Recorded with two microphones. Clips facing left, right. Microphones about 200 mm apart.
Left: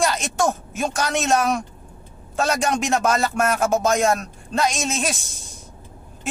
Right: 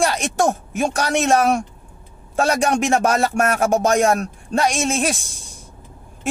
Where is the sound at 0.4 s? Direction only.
55° right (ahead or behind).